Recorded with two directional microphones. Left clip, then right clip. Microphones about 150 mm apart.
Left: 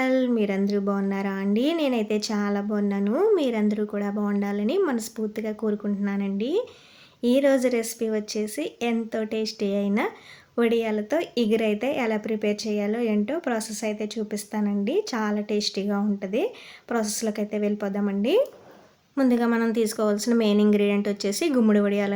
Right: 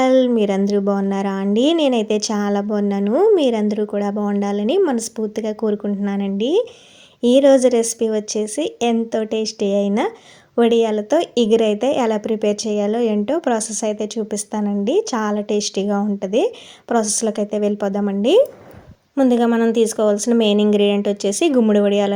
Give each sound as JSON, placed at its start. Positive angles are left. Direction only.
{"t": 0.0, "sound": "speech", "side_deg": -40}
{"t": 19.1, "sound": "speech", "side_deg": -25}